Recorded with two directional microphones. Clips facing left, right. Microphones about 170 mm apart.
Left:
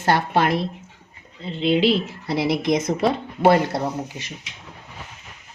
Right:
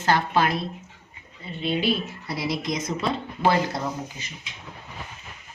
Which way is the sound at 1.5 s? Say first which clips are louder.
Left 6 dB; 90° left.